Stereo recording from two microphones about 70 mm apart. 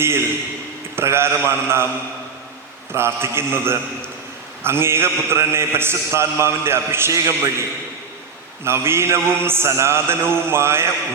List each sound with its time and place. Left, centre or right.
0.0 s a man's voice: right
2.9 s a man's voice: right
8.6 s a man's voice: right